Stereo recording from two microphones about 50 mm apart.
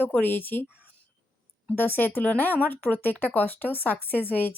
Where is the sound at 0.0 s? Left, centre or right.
Left.